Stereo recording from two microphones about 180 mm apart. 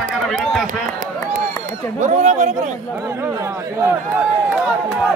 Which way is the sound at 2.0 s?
40° right (ahead or behind).